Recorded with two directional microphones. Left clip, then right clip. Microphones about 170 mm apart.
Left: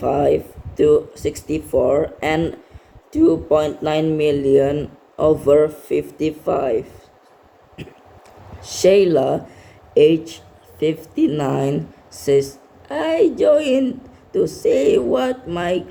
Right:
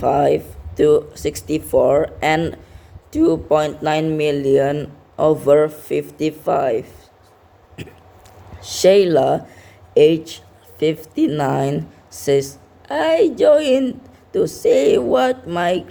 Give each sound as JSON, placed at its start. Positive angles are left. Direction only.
{"t": 0.0, "sound": "speech", "side_deg": -45}
{"t": 8.6, "sound": "speech", "side_deg": -35}
{"t": 12.9, "sound": "speech", "side_deg": -40}